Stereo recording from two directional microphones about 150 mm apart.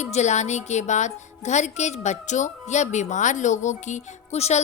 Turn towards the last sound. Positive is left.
turn(degrees=45)  # may be behind; listen again after turning